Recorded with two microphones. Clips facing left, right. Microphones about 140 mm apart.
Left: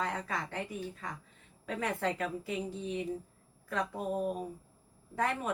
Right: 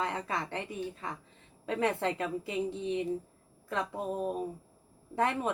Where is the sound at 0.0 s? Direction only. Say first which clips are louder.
Right 2 dB; 25° right (ahead or behind).